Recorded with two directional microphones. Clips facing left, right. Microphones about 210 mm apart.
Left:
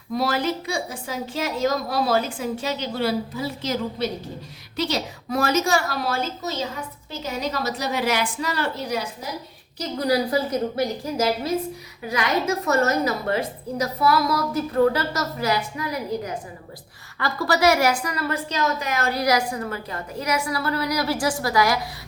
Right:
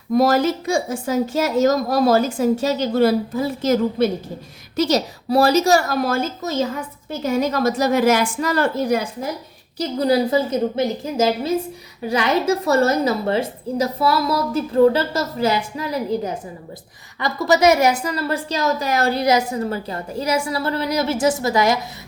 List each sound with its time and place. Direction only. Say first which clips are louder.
0.1 s a woman's voice: right 7 dB; 45° right (ahead or behind)
10.0 s a woman's voice: right 4 dB; 25° right (ahead or behind)